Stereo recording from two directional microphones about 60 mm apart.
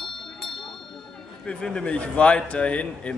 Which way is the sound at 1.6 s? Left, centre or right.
Centre.